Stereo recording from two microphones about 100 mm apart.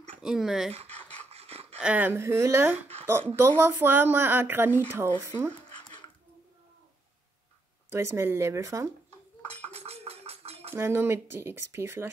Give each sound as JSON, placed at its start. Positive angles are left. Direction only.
{"t": 0.2, "sound": "speech", "side_deg": -5}
{"t": 0.8, "sound": "rub", "side_deg": 15}
{"t": 1.3, "sound": "a sound", "side_deg": -90}
{"t": 1.8, "sound": "speech", "side_deg": -15}
{"t": 5.8, "sound": "dog", "side_deg": 50}
{"t": 7.9, "sound": "speech", "side_deg": -25}
{"t": 9.7, "sound": "a sound", "side_deg": -90}
{"t": 10.7, "sound": "speech", "side_deg": -20}